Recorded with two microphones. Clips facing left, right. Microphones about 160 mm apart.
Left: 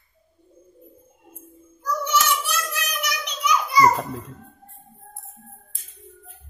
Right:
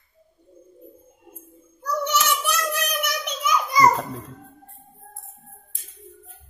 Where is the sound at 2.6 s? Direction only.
55° right (ahead or behind).